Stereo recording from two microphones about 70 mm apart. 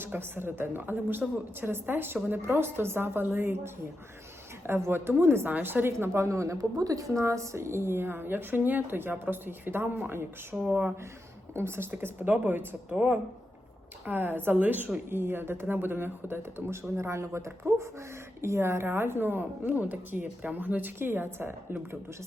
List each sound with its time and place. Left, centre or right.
0.0 s a woman's voice: right
5.9 s a woman's voice: right
10.5 s speech: centre
11.5 s a woman's voice: right